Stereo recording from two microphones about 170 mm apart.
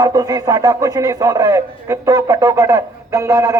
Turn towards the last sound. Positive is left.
turn(degrees=-20)  # may be behind; listen again after turning